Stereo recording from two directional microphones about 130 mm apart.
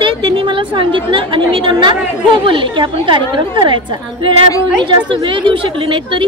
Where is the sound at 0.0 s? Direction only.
40° right (ahead or behind).